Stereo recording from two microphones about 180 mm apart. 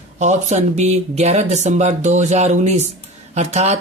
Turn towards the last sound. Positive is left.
turn(degrees=-40)  # may be behind; listen again after turning